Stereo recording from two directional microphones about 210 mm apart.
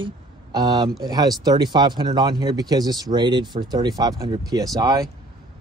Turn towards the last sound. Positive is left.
turn(degrees=-20)  # may be behind; listen again after turning